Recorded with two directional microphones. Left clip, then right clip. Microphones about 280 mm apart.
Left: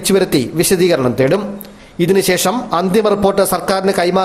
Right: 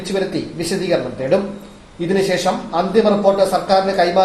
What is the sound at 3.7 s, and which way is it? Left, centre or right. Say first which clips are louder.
Speech: even; left.